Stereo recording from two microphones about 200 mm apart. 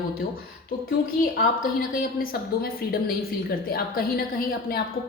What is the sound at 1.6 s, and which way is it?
A woman's voice, 45° left (ahead or behind).